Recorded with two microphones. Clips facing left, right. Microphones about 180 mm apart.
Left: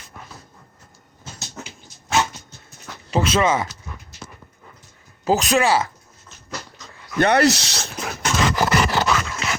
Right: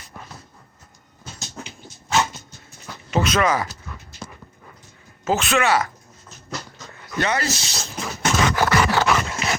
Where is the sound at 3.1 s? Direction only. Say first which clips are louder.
Left 1 dB; 30° left (ahead or behind).